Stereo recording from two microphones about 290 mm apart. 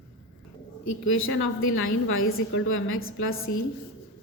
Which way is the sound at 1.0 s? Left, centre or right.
Left.